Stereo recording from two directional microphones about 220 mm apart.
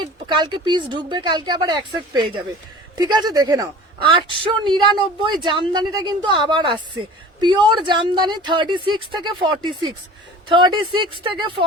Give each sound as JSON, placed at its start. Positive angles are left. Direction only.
{"t": 0.3, "sound": "speech", "side_deg": -20}